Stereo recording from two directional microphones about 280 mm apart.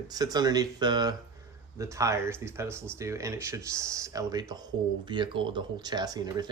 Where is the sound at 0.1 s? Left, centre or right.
Centre.